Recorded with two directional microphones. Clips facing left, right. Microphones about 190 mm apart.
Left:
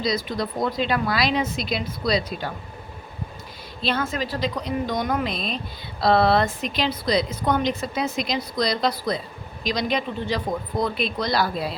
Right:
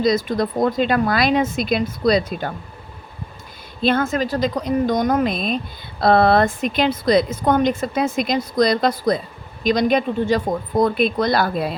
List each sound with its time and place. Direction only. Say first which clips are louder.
0.0 s a woman's voice: right 7 dB; 50° right (ahead or behind)
3.8 s a woman's voice: right 7 dB; 50° right (ahead or behind)